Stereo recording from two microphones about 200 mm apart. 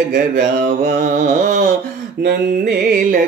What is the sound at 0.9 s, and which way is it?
Mantra, 35° right (ahead or behind).